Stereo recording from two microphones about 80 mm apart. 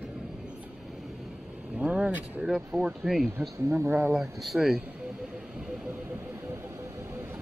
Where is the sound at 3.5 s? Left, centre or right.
Right.